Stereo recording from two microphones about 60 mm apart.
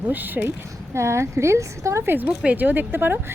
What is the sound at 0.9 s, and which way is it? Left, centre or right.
A woman's voice, right.